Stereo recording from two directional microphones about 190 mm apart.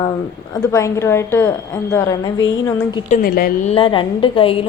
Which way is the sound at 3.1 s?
50° left (ahead or behind).